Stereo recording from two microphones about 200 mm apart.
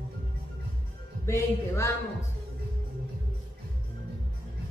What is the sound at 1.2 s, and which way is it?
Speech, 15° left (ahead or behind).